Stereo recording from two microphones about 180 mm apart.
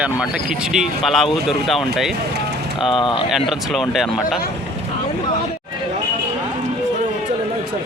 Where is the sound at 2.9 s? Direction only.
25° left (ahead or behind).